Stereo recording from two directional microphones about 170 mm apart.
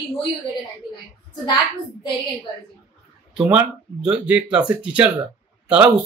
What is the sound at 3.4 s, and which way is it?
Speech, 5° right (ahead or behind).